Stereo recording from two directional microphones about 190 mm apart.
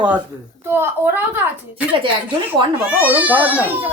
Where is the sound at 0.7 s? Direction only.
10° right (ahead or behind).